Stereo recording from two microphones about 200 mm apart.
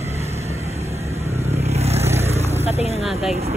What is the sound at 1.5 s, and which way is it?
Vehicle, 30° right (ahead or behind).